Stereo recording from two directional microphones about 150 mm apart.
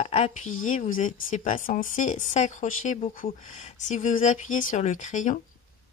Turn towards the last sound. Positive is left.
turn(degrees=55)  # may be behind; listen again after turning